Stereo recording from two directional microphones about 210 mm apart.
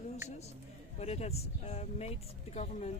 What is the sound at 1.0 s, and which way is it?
Speech, 30° left (ahead or behind).